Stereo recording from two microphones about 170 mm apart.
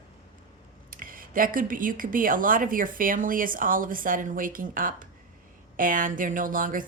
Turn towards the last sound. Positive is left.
turn(degrees=-55)  # may be behind; listen again after turning